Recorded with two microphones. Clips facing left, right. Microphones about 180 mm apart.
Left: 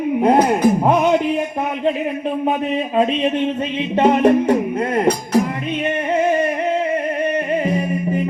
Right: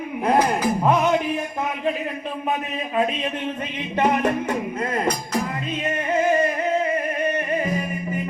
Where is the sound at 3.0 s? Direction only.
25° left (ahead or behind).